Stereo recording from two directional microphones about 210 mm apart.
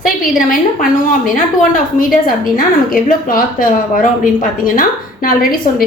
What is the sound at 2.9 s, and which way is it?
A woman's voice, 40° left (ahead or behind).